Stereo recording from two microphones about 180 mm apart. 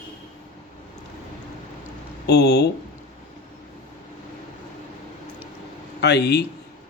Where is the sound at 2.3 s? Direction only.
65° left (ahead or behind).